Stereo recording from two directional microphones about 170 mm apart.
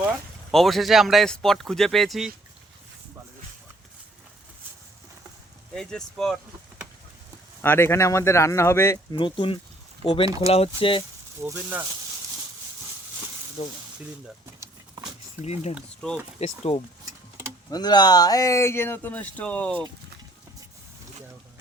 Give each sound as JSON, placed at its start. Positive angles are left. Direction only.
{"t": 0.5, "sound": "speech", "side_deg": 0}
{"t": 5.7, "sound": "speech", "side_deg": 5}
{"t": 7.6, "sound": "speech", "side_deg": 15}
{"t": 9.1, "sound": "speech", "side_deg": 30}
{"t": 10.2, "sound": "speech", "side_deg": -20}
{"t": 10.5, "sound": "speech", "side_deg": 35}
{"t": 11.3, "sound": "speech", "side_deg": -15}
{"t": 15.4, "sound": "speech", "side_deg": 40}